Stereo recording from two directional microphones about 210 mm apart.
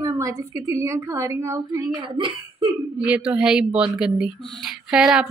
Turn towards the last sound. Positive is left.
turn(degrees=-5)  # may be behind; listen again after turning